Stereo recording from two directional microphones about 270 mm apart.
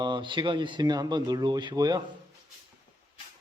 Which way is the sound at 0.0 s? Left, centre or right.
Centre.